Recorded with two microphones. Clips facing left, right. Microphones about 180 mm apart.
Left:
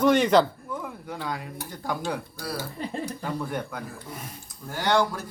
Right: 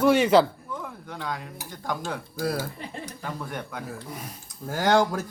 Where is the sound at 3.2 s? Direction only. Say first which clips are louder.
Left 4 dB; centre (ahead or behind).